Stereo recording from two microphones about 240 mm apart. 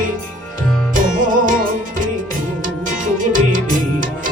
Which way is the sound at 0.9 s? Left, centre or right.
Right.